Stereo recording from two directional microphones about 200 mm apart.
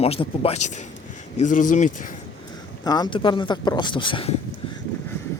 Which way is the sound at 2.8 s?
20° left (ahead or behind).